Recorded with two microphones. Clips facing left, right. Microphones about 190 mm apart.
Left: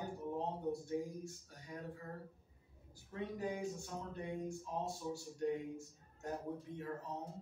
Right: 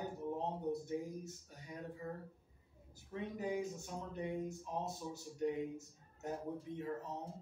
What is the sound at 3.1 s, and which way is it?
Speech, 20° right (ahead or behind).